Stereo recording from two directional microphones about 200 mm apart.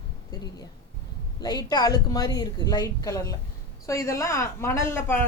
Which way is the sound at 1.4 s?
20° left (ahead or behind).